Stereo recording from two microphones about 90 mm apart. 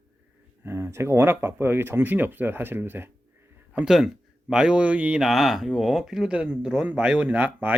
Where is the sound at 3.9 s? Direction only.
5° right (ahead or behind).